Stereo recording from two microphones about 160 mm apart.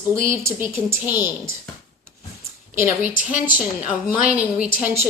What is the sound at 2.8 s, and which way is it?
A woman's voice, 10° right (ahead or behind).